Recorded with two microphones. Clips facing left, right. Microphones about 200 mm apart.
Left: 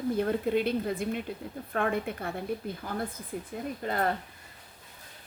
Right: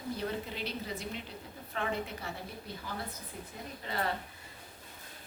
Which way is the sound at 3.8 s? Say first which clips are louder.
Left 7 dB; 50° left (ahead or behind).